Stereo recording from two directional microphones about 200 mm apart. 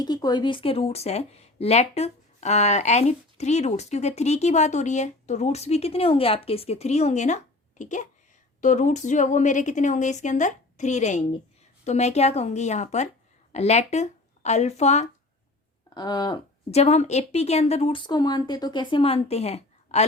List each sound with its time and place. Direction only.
0.0 s speech: 20° left (ahead or behind)
16.0 s a woman's voice: 20° left (ahead or behind)